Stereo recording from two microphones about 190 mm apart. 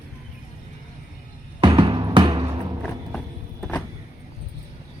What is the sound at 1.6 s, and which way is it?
Music, 25° right (ahead or behind).